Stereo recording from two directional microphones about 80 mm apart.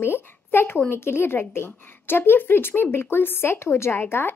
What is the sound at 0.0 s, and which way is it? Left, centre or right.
Speech, left.